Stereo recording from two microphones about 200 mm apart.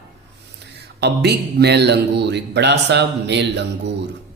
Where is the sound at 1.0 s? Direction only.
55° right (ahead or behind).